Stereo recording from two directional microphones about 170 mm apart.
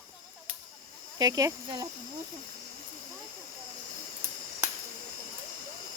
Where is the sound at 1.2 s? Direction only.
20° right (ahead or behind).